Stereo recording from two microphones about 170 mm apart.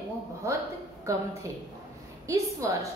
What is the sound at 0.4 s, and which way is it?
A woman's voice, 20° right (ahead or behind).